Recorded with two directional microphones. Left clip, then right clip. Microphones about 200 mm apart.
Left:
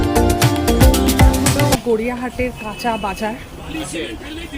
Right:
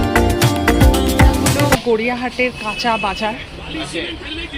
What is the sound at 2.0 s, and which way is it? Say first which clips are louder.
Speech: right 3 dB; 10° left (ahead or behind).